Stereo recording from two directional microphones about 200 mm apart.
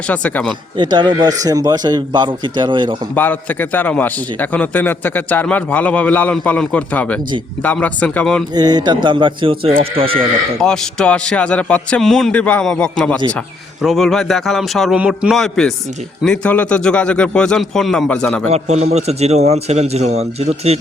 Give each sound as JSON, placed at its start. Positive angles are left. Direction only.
{"t": 0.1, "sound": "a man's voice", "side_deg": 5}
{"t": 0.8, "sound": "speech", "side_deg": -20}
{"t": 3.2, "sound": "a man's voice", "side_deg": 10}
{"t": 8.5, "sound": "speech", "side_deg": -20}
{"t": 10.6, "sound": "a man's voice", "side_deg": 5}
{"t": 18.5, "sound": "a man's voice", "side_deg": -35}